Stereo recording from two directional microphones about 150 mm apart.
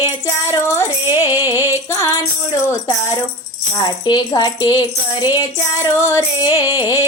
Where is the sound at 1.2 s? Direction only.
20° left (ahead or behind).